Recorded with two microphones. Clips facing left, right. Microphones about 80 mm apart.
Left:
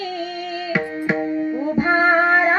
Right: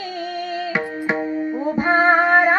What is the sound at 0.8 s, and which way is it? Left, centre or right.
Tabla, centre.